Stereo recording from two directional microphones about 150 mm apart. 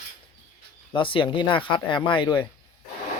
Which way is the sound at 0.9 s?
35° left (ahead or behind).